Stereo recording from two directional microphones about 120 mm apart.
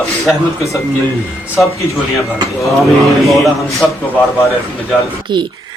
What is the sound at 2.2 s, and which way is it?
Speech, centre (ahead or behind).